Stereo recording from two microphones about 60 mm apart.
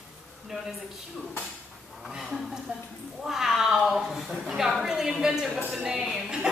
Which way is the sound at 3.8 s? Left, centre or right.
Centre.